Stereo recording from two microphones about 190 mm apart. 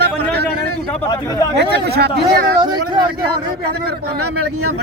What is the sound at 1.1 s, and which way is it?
Speech, 20° left (ahead or behind).